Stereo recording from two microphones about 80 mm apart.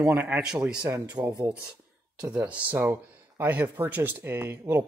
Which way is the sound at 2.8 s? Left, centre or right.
Right.